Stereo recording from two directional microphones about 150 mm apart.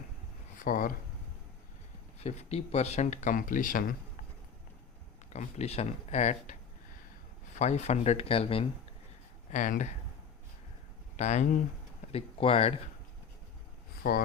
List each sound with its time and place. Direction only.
0.6 s speech: 65° left (ahead or behind)
2.2 s speech: 45° left (ahead or behind); by 3.9 s 65° left (ahead or behind)
5.3 s speech: 45° left (ahead or behind)
9.5 s speech: 55° left (ahead or behind)
11.2 s speech: 50° left (ahead or behind)
12.1 s speech: 40° left (ahead or behind)
14.0 s speech: 70° left (ahead or behind)